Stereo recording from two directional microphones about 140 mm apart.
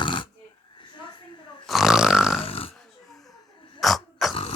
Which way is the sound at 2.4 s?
40° left (ahead or behind).